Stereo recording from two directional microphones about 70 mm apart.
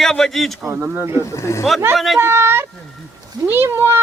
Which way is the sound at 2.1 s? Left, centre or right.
Right.